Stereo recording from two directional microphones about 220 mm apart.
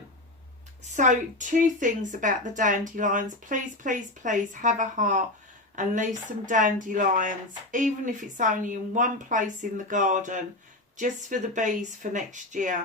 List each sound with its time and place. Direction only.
0.9 s speech: 35° right (ahead or behind)